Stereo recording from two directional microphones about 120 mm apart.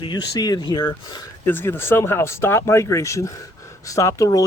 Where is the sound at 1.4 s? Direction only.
20° left (ahead or behind).